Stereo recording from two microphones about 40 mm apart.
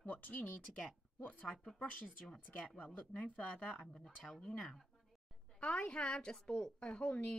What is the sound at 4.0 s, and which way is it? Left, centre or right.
Speech, centre.